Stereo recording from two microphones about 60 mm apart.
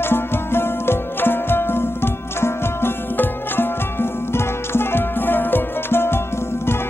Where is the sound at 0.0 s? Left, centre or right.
Left.